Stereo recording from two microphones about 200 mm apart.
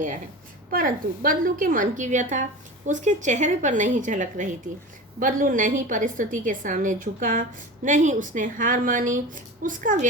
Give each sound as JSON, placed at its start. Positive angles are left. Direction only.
{"t": 0.7, "sound": "a woman's voice", "side_deg": -45}